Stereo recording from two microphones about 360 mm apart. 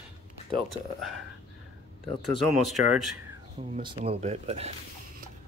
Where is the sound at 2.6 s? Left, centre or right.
Centre.